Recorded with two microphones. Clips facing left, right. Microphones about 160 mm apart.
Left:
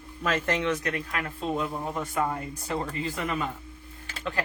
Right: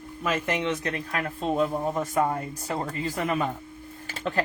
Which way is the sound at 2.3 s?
30° right (ahead or behind).